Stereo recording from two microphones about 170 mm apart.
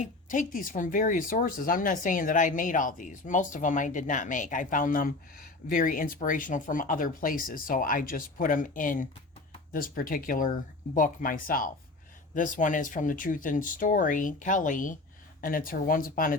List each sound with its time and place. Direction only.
0.0 s speech: 50° left (ahead or behind)